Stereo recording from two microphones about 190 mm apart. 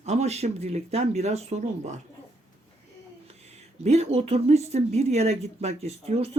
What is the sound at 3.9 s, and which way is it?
Speech, 35° right (ahead or behind).